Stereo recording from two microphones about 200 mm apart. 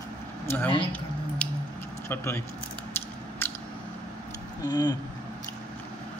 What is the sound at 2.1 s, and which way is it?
Speech, 15° left (ahead or behind).